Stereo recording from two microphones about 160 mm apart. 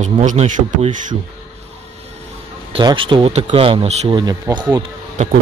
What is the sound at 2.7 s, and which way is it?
Speech, 30° right (ahead or behind).